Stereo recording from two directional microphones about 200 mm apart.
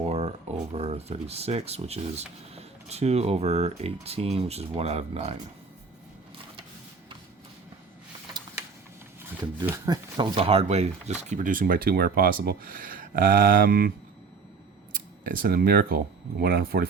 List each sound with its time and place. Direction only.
0.0 s speech: 30° right (ahead or behind)
9.6 s speech: 20° right (ahead or behind); by 13.9 s 45° right (ahead or behind)
15.3 s speech: 45° right (ahead or behind)